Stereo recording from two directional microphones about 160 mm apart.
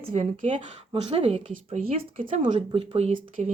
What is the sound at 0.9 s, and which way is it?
Speech, 40° right (ahead or behind).